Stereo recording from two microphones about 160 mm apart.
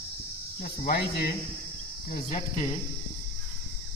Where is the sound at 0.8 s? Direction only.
85° left.